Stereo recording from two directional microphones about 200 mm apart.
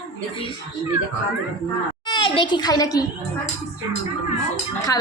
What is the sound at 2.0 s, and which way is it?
A child's voice, 20° left (ahead or behind).